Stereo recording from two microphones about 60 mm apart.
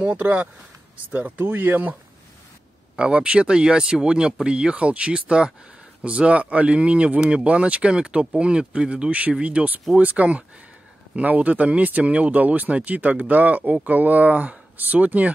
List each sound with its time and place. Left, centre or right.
0.0 s speech: right
3.0 s speech: centre